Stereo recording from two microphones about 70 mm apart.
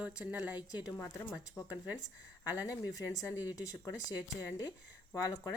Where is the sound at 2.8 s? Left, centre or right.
Left.